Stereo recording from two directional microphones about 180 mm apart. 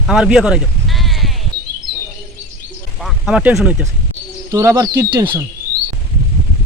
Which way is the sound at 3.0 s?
Centre (ahead or behind).